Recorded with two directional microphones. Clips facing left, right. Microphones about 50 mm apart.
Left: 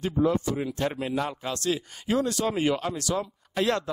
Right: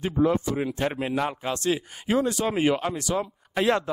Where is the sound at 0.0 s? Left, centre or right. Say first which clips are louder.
Right 1 dB; right.